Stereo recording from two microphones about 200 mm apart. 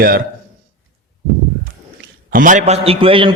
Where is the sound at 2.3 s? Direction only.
40° right (ahead or behind); by 3.3 s 25° right (ahead or behind).